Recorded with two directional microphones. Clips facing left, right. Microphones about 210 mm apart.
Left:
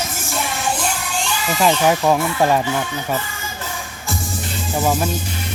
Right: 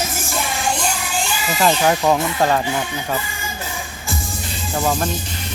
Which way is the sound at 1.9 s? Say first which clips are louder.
Left 1 dB; 5° left (ahead or behind).